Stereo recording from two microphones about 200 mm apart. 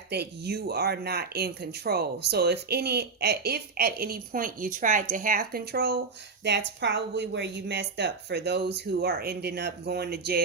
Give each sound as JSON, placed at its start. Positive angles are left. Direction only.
{"t": 0.1, "sound": "speech", "side_deg": -55}